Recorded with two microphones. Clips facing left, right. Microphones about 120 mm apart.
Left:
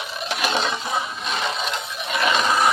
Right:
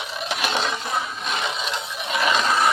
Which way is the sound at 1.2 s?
5° right (ahead or behind).